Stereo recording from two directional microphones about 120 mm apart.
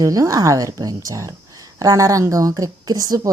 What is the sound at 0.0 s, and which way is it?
A woman's voice, 30° right (ahead or behind).